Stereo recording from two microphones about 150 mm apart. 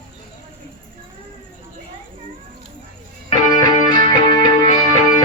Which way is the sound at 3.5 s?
30° left (ahead or behind).